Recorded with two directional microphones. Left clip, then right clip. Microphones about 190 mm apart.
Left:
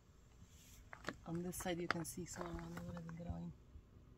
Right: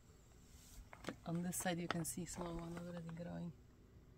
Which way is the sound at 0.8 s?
10° left (ahead or behind).